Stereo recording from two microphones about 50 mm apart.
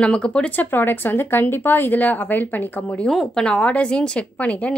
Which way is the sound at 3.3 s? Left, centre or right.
Centre.